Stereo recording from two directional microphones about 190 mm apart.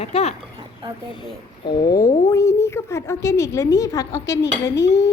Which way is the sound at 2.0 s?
15° left (ahead or behind).